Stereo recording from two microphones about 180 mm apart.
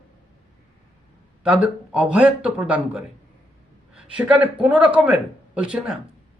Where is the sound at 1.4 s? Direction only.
5° right (ahead or behind).